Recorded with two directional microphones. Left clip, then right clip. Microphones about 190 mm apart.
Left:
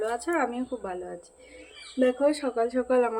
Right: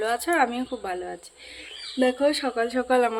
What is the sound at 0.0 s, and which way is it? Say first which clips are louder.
A woman's voice: right 5 dB; 5° right (ahead or behind).